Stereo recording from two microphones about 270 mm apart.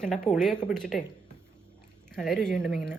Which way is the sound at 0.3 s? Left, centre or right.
Centre.